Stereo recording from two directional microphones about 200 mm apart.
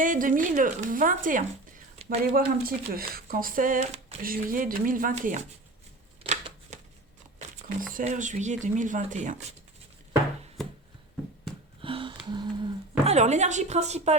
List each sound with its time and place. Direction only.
0.0 s speech: 40° right (ahead or behind)
6.2 s shuffling cards: 35° right (ahead or behind)
7.3 s speech: 40° right (ahead or behind)
11.8 s a sound: 25° right (ahead or behind)
13.1 s speech: 35° right (ahead or behind)